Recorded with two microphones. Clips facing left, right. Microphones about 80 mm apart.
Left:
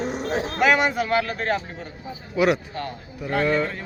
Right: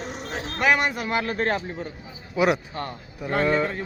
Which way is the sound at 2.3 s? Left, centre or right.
Right.